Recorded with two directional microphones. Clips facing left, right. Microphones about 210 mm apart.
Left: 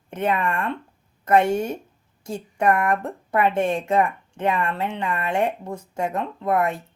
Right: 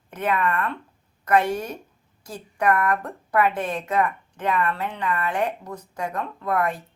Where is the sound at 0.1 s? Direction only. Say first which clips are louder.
Left 1 dB; 25° left (ahead or behind).